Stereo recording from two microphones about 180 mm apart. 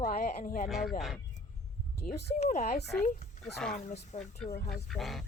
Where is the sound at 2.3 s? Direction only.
40° left (ahead or behind).